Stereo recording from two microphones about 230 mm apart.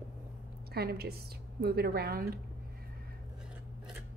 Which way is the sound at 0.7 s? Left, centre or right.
Right.